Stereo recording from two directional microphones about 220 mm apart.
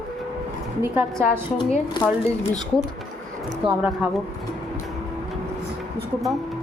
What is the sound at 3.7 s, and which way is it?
Speech, 5° right (ahead or behind).